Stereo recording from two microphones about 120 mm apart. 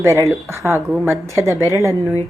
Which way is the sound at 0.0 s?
25° right (ahead or behind).